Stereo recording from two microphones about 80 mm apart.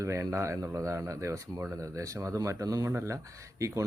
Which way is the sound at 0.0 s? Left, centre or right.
Right.